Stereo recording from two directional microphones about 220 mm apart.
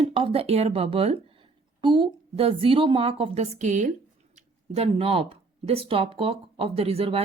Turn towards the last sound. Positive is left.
turn(degrees=-25)  # may be behind; listen again after turning